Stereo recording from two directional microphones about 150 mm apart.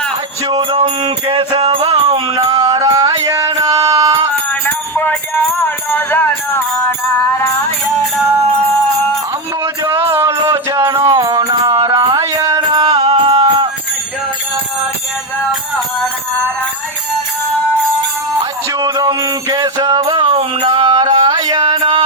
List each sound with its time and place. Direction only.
0.4 s music: 35° right (ahead or behind)
4.6 s music: 15° left (ahead or behind)
9.8 s music: 15° right (ahead or behind)
10.5 s a sound: 20° right (ahead or behind)
11.2 s music: 25° right (ahead or behind)
13.0 s music: 45° right (ahead or behind)
13.2 s music: 30° right (ahead or behind)
18.7 s music: 25° right (ahead or behind)